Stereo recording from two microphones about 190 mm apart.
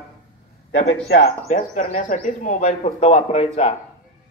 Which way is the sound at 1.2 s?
40° left (ahead or behind).